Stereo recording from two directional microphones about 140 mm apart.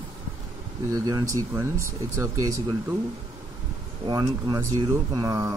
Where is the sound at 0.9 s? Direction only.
25° right (ahead or behind).